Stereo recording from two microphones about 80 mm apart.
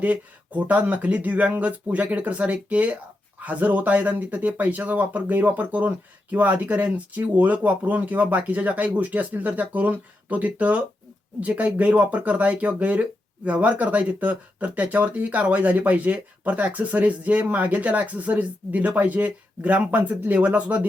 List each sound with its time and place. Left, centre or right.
0.0 s speech: centre